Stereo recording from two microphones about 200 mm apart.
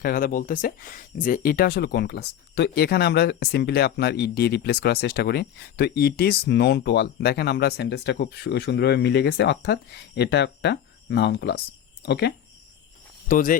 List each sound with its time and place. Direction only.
0.0 s speech: 45° left (ahead or behind)
13.2 s speech: 40° left (ahead or behind)